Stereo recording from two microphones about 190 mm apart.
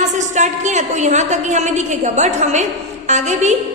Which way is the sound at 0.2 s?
40° right (ahead or behind).